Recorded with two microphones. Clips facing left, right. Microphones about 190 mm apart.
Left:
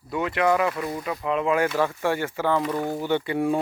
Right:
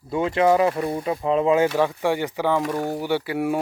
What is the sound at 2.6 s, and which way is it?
Speech, 40° right (ahead or behind).